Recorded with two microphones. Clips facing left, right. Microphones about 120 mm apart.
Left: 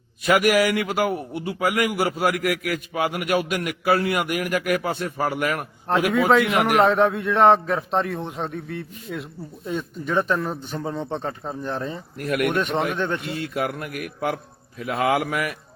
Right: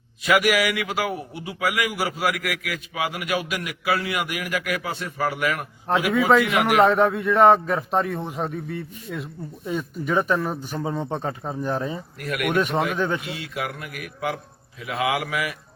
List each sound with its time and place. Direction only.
0.3 s a man's voice: 45° left (ahead or behind)
5.9 s a man's voice: centre (ahead or behind)
12.2 s a man's voice: 45° left (ahead or behind)
12.5 s a man's voice: 5° right (ahead or behind)
13.3 s a man's voice: 50° left (ahead or behind)